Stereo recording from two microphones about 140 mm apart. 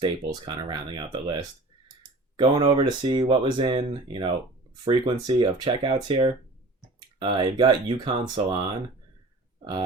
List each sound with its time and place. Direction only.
0.0 s speech: 30° right (ahead or behind)